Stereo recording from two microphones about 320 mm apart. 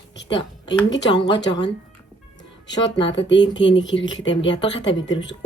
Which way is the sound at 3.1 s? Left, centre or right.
Left.